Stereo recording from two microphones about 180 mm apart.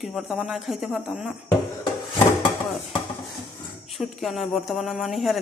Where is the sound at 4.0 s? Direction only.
Centre (ahead or behind).